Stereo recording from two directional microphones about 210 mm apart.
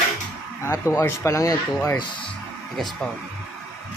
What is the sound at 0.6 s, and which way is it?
Speech, 15° left (ahead or behind).